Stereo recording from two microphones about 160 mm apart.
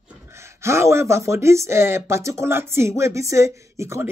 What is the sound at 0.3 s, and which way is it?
Speech, 15° right (ahead or behind).